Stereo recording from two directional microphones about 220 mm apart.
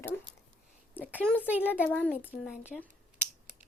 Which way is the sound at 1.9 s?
5° left (ahead or behind).